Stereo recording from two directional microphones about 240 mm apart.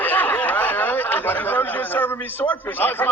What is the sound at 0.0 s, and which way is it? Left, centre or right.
A man's voice, centre.